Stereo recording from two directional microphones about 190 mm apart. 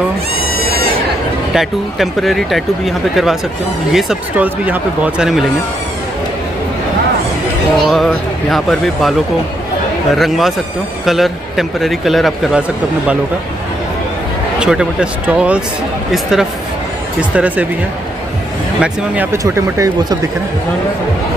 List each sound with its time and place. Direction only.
0.6 s goat: 55° right (ahead or behind)
1.5 s a man's voice: centre (ahead or behind)
7.8 s a man's voice: centre (ahead or behind)
10.1 s a man's voice: centre (ahead or behind)
14.6 s a man's voice: 5° right (ahead or behind)
18.8 s speech: 10° right (ahead or behind)